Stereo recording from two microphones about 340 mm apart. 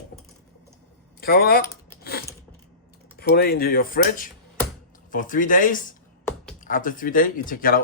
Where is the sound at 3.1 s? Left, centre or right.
Left.